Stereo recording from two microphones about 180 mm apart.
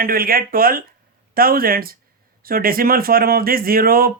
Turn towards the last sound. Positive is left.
turn(degrees=-55)  # may be behind; listen again after turning